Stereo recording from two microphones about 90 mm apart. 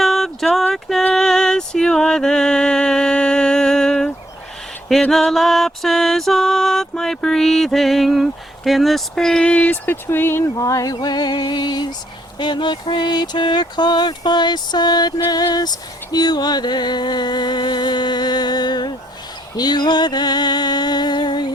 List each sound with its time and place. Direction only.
0.0 s a sound: centre (ahead or behind)
0.7 s music: 5° left (ahead or behind)
1.1 s a sound: 5° left (ahead or behind)
5.1 s music: 5° left (ahead or behind); by 10.4 s 25° left (ahead or behind)
10.6 s music: 40° left (ahead or behind)
12.4 s speech: 55° left (ahead or behind)
19.5 s music: 55° left (ahead or behind)